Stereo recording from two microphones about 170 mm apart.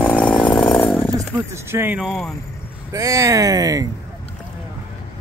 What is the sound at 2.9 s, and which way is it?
Speech, 20° right (ahead or behind).